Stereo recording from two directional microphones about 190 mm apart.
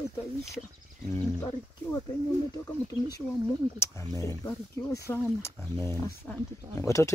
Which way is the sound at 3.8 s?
15° left (ahead or behind).